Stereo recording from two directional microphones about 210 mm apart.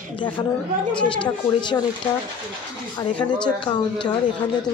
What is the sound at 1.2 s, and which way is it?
Speech, 20° left (ahead or behind).